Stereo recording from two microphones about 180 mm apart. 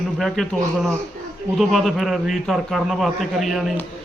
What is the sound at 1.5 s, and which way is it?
A man's voice, centre (ahead or behind).